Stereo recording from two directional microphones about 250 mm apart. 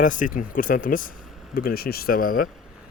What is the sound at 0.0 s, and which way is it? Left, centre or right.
Speech, left.